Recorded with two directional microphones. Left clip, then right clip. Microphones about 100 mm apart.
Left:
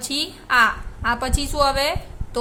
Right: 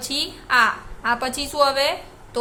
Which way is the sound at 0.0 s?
30° left (ahead or behind).